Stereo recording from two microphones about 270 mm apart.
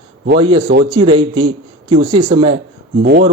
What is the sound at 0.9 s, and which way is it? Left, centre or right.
Speech, centre.